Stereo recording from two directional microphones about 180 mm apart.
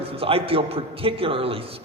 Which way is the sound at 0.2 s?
30° right (ahead or behind).